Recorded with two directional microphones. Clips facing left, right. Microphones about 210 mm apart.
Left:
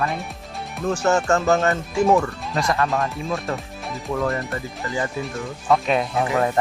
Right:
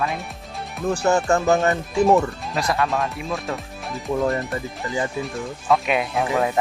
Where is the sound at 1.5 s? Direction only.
15° right (ahead or behind).